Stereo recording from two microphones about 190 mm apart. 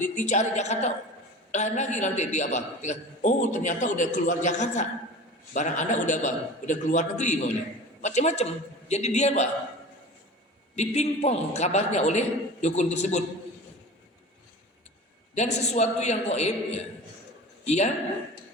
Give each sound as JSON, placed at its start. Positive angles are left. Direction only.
{"t": 0.0, "sound": "a man's voice", "side_deg": 40}
{"t": 10.8, "sound": "a man's voice", "side_deg": 35}
{"t": 15.5, "sound": "a man's voice", "side_deg": 35}